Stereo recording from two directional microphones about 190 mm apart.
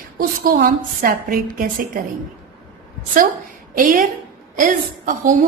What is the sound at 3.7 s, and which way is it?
A woman's voice, 45° right (ahead or behind).